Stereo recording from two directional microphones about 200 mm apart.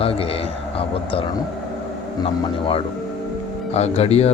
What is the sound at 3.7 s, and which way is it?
Speech, 30° left (ahead or behind).